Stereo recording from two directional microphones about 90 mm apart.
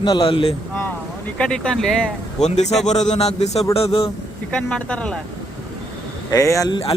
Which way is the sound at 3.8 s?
90° left.